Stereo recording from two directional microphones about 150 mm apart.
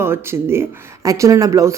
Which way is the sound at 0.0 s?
15° right (ahead or behind).